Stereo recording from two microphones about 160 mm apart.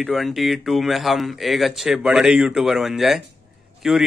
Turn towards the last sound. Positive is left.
turn(degrees=0)  # may be behind; listen again after turning